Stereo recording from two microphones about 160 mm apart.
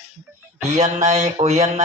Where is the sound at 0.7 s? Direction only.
45° right (ahead or behind).